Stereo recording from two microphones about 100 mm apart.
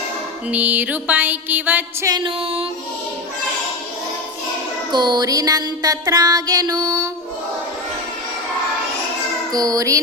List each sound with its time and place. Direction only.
0.4 s music: 15° right (ahead or behind)
2.2 s music: 70° right (ahead or behind)
4.9 s music: 45° right (ahead or behind)
9.5 s music: 40° right (ahead or behind)